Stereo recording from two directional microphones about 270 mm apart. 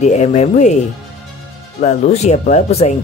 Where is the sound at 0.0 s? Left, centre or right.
Left.